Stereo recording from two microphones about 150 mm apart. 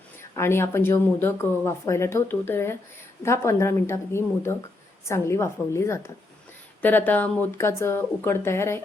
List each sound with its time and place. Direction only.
0.2 s speech: 15° left (ahead or behind)